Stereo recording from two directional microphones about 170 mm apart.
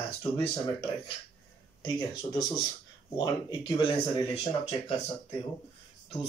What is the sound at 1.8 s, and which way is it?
Speech, 25° left (ahead or behind).